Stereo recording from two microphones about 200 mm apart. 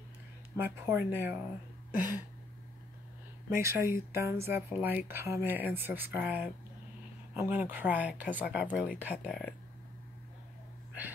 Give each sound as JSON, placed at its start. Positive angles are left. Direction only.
{"t": 0.6, "sound": "speech", "side_deg": -10}
{"t": 1.9, "sound": "a sound", "side_deg": -10}
{"t": 3.4, "sound": "speech", "side_deg": -15}
{"t": 9.2, "sound": "speech", "side_deg": 5}